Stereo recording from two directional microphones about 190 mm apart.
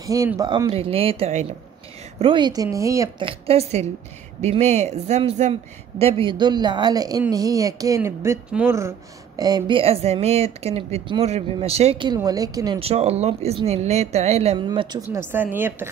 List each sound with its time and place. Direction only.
0.0 s speech: 15° right (ahead or behind)
0.7 s speech: 30° right (ahead or behind)
3.3 s speech: 30° right (ahead or behind)
14.7 s speech: 20° right (ahead or behind)
15.0 s speech: 10° right (ahead or behind)